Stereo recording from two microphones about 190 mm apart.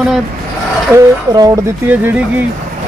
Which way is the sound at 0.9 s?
15° right (ahead or behind).